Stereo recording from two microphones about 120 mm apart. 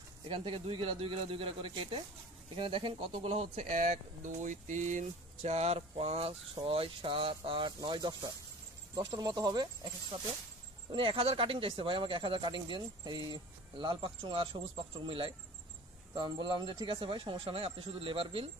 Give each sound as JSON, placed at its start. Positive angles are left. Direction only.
{"t": 0.3, "sound": "speech", "side_deg": -45}
{"t": 3.1, "sound": "speech", "side_deg": -55}